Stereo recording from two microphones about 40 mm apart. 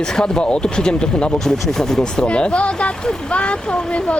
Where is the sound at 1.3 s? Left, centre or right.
Centre; by 3.0 s left.